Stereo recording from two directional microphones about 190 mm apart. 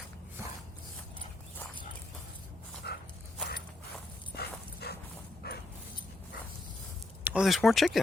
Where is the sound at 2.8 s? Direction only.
60° left (ahead or behind).